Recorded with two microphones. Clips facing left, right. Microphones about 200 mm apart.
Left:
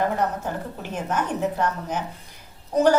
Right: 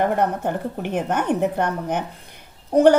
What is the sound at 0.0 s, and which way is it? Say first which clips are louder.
A woman's voice: right 4 dB; 60° right (ahead or behind).